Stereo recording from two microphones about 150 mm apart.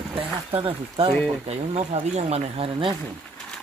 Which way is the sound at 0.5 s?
35° right (ahead or behind).